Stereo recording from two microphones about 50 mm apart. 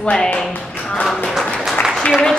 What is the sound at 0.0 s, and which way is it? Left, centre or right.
Speech, centre.